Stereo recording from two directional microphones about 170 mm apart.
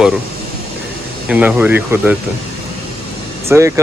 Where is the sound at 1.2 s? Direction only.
5° right (ahead or behind).